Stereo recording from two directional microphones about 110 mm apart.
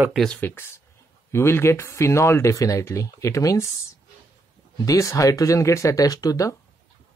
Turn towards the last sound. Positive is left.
turn(degrees=35)  # may be behind; listen again after turning